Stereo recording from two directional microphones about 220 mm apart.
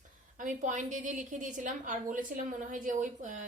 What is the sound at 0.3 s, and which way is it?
A woman's voice, 35° right (ahead or behind).